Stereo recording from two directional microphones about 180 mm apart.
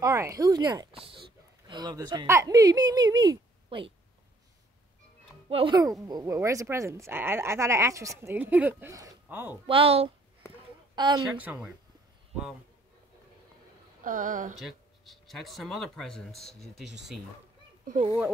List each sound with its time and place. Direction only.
0.0 s speech: 15° right (ahead or behind)
5.5 s a woman's voice: 30° right (ahead or behind)
6.0 s speech: 20° right (ahead or behind)
9.7 s a woman's voice: 30° right (ahead or behind)
11.2 s speech: 5° right (ahead or behind)
14.0 s speech: 50° right (ahead or behind)
14.6 s speech: centre (ahead or behind)
17.8 s speech: 45° right (ahead or behind)